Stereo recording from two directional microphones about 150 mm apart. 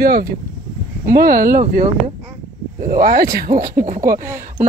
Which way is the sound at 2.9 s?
85° right.